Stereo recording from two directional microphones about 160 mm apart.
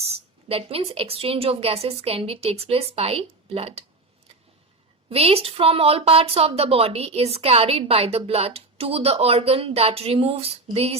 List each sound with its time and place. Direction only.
0.0 s a woman's voice: 40° right (ahead or behind)
5.0 s a woman's voice: 40° right (ahead or behind)